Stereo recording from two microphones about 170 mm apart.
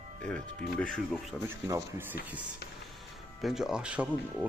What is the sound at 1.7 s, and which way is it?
Speech, 15° right (ahead or behind).